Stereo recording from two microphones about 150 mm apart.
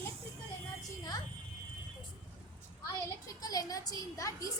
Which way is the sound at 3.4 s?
25° left (ahead or behind).